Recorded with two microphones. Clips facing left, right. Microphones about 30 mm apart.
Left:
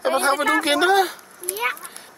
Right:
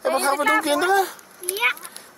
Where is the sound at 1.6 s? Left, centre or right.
Right.